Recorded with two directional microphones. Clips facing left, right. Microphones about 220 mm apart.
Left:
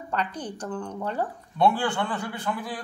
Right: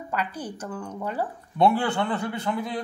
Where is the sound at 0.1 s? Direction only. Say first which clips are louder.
Left 1 dB; 10° right (ahead or behind).